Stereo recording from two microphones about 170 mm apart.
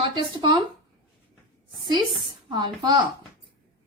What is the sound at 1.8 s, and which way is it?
A woman's voice, 25° right (ahead or behind).